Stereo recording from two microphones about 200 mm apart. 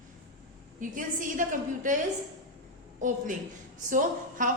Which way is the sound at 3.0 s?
40° right (ahead or behind).